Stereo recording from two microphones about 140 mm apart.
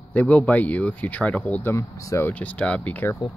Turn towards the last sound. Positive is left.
turn(degrees=10)  # may be behind; listen again after turning